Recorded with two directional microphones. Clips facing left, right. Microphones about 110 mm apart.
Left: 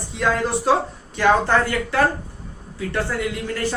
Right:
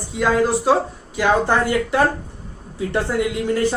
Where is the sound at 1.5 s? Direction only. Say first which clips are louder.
Right 2 dB; 15° right (ahead or behind).